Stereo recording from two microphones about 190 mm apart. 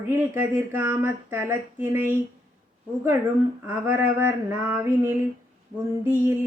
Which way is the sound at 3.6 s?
10° right (ahead or behind).